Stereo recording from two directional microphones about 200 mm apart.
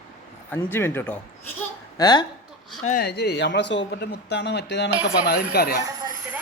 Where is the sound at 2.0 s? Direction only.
20° left (ahead or behind).